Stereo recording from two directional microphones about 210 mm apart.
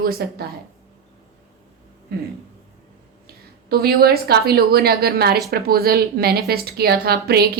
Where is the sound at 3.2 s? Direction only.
45° right (ahead or behind).